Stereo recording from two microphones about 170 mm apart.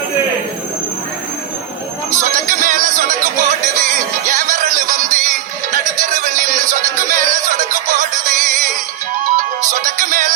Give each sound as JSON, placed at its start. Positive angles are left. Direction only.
{"t": 2.1, "sound": "music", "side_deg": -50}